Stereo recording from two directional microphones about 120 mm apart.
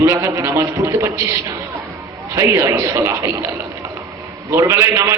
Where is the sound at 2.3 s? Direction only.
25° right (ahead or behind).